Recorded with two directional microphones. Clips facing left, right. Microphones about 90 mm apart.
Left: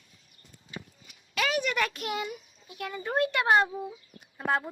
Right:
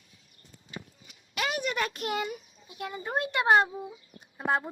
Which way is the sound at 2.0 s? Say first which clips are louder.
Right 1 dB; 40° right (ahead or behind).